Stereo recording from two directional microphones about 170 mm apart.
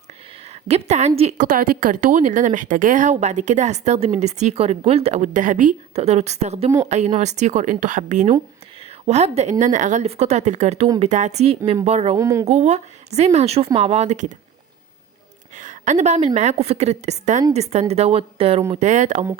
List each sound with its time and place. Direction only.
0.7 s a woman's voice: 40° right (ahead or behind)
12.1 s speech: 15° right (ahead or behind)
12.5 s a woman's voice: 40° right (ahead or behind)
15.5 s a woman's voice: 45° right (ahead or behind)